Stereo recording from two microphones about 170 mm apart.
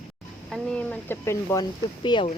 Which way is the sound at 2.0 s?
30° left (ahead or behind).